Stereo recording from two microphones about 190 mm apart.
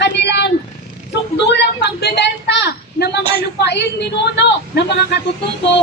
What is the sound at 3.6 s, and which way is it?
A woman's voice, 60° left (ahead or behind).